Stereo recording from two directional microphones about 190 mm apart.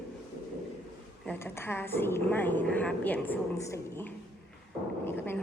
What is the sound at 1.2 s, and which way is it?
A woman's voice, 10° left (ahead or behind).